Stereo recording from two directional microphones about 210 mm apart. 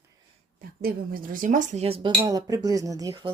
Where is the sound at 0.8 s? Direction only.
45° right (ahead or behind).